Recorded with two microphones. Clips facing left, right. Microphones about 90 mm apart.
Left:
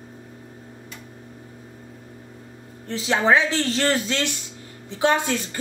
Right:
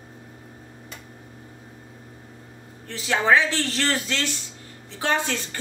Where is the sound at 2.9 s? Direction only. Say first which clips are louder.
Left 1 dB; 20° left (ahead or behind).